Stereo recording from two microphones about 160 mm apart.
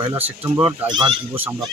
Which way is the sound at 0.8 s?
30° right (ahead or behind).